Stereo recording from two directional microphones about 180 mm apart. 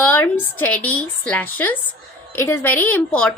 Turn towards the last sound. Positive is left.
turn(degrees=5)  # may be behind; listen again after turning